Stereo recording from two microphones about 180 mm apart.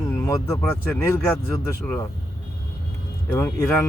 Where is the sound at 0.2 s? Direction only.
15° left (ahead or behind).